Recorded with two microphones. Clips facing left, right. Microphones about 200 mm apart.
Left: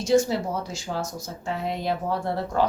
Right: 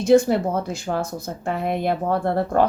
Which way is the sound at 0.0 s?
55° right (ahead or behind).